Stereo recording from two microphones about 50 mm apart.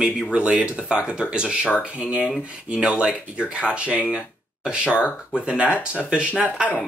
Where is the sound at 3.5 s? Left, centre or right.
Right.